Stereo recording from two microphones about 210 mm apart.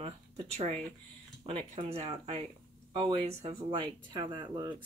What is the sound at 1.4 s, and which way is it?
Speech, 25° right (ahead or behind).